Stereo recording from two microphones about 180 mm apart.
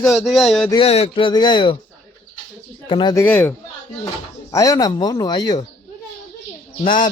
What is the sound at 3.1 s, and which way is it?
Speech, 10° left (ahead or behind).